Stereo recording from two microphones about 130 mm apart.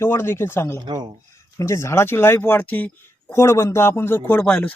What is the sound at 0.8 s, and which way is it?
Speech, 35° right (ahead or behind).